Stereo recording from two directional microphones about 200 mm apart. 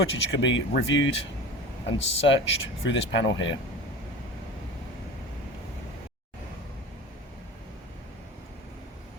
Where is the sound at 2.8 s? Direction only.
65° left (ahead or behind).